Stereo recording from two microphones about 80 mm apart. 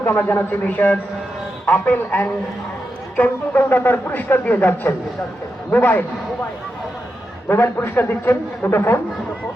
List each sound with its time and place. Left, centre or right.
0.0 s speech: left
7.4 s speech: left